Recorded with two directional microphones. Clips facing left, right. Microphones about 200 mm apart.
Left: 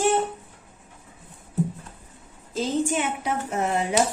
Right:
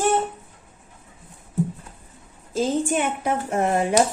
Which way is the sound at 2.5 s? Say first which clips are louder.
Right 2 dB; 50° right (ahead or behind).